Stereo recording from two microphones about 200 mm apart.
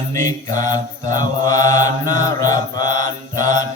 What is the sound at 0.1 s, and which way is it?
Mantra, 15° left (ahead or behind).